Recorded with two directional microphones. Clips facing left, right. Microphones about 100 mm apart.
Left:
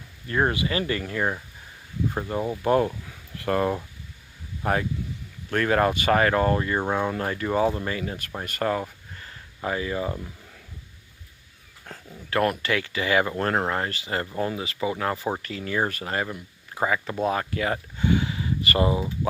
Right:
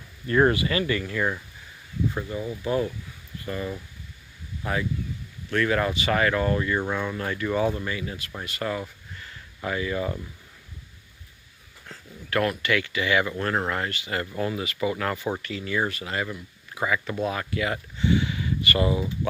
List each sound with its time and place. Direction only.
0.3 s speech: 10° left (ahead or behind)
0.5 s speech: 20° left (ahead or behind)
2.3 s speech: 50° left (ahead or behind)
3.3 s speech: 70° left (ahead or behind)
4.6 s speech: 45° left (ahead or behind)
8.4 s a sound: 45° left (ahead or behind)
9.6 s speech: 30° left (ahead or behind)
11.9 s a sound: 50° left (ahead or behind)
12.3 s speech: 35° left (ahead or behind)
15.2 s speech: 35° left (ahead or behind)